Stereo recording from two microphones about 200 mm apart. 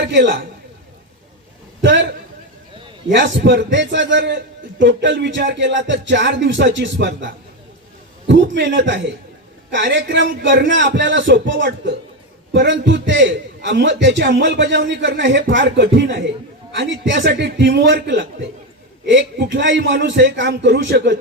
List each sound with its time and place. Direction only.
0.0 s a man's voice: 60° right (ahead or behind)
1.8 s a man's voice: 65° right (ahead or behind)
3.1 s a man's voice: 65° right (ahead or behind)